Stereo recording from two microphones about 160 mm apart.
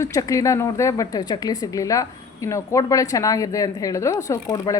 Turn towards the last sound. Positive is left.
turn(degrees=20)  # may be behind; listen again after turning